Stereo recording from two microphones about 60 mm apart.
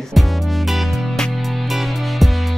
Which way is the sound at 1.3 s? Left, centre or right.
Centre.